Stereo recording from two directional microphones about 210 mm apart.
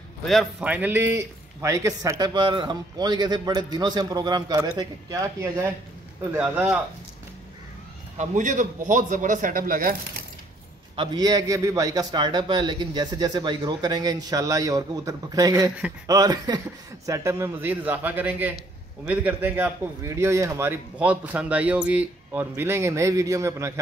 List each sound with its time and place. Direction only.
0.2 s a man's voice: centre (ahead or behind)
8.2 s a man's voice: 35° right (ahead or behind)
11.0 s a man's voice: 20° right (ahead or behind)